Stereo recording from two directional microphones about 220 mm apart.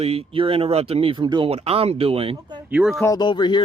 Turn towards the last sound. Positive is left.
turn(degrees=20)  # may be behind; listen again after turning